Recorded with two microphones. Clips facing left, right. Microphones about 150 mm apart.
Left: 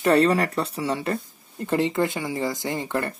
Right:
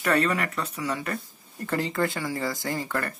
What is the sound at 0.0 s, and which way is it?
Speech, 30° left (ahead or behind).